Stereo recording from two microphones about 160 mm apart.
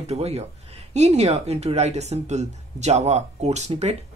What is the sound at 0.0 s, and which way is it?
Speech, 40° right (ahead or behind).